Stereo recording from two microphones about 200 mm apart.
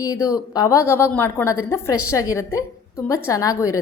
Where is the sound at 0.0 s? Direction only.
15° left (ahead or behind).